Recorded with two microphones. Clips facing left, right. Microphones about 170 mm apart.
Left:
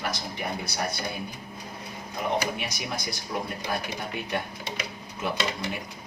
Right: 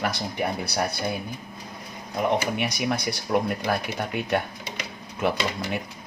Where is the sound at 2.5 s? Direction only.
65° right (ahead or behind).